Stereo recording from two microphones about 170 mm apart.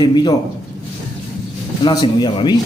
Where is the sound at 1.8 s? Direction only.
25° left (ahead or behind).